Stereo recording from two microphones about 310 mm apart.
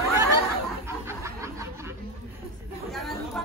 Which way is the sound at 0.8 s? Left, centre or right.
Centre.